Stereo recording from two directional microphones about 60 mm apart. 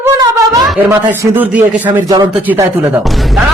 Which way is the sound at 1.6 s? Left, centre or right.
Right.